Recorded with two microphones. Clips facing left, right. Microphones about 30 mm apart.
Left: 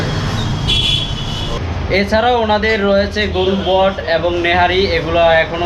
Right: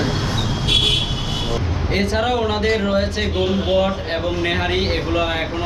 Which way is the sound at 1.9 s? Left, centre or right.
Left.